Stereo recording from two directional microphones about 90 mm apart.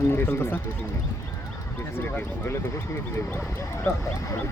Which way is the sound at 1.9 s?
25° left (ahead or behind).